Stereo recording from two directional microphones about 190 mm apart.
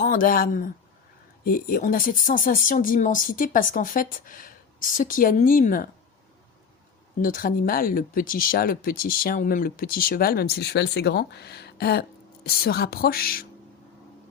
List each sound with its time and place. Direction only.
0.0 s speech: 45° left (ahead or behind)
7.2 s speech: 45° left (ahead or behind)